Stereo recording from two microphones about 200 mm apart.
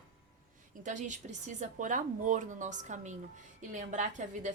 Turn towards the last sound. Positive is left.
turn(degrees=-40)  # may be behind; listen again after turning